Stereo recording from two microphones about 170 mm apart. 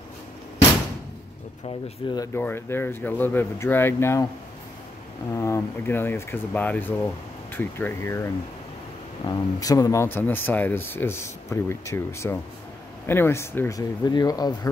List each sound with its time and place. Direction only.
1.7 s speech: 25° left (ahead or behind)
2.3 s speech: 15° left (ahead or behind)
5.3 s speech: 15° left (ahead or behind)
9.2 s speech: 20° left (ahead or behind)